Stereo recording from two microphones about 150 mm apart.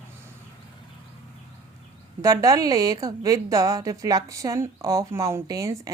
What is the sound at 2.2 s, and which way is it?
Speech, 20° right (ahead or behind).